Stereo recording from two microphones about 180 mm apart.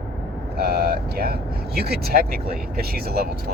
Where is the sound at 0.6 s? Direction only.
60° right (ahead or behind).